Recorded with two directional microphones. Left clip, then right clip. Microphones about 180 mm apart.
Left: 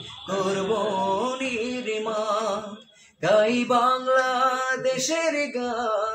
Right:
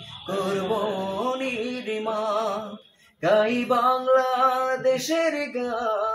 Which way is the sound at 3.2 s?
20° left (ahead or behind).